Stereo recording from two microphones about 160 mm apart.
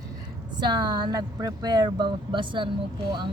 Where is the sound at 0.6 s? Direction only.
25° right (ahead or behind).